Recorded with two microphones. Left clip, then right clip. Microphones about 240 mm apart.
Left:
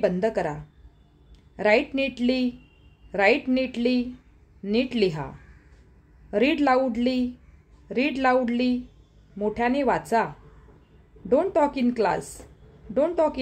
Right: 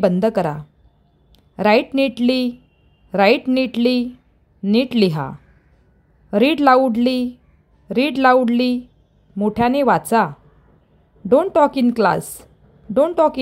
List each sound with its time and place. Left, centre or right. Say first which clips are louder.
0.0 s a woman's voice: right 7 dB; right
6.3 s a woman's voice: right 8 dB; right